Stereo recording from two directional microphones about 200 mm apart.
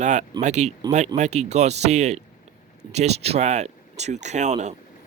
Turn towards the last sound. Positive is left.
turn(degrees=-35)  # may be behind; listen again after turning